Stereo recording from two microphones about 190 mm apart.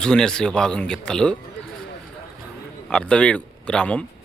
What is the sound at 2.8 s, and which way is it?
Speech, 5° left (ahead or behind).